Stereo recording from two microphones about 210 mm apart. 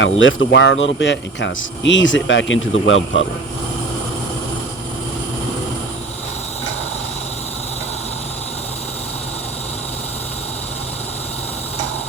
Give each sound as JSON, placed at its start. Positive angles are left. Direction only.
{"t": 0.0, "sound": "speech", "side_deg": 65}